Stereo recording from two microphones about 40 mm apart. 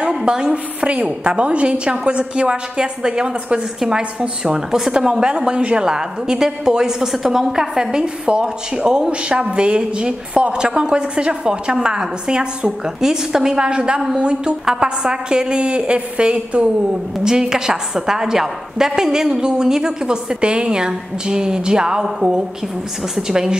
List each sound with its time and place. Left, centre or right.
0.2 s a woman's voice: centre
5.3 s a woman's voice: right
8.0 s a woman's voice: right
17.2 s a woman's voice: centre